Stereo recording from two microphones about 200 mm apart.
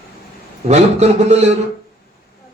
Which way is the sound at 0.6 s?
35° right (ahead or behind).